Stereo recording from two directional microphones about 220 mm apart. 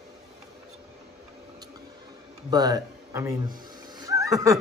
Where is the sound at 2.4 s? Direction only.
15° right (ahead or behind).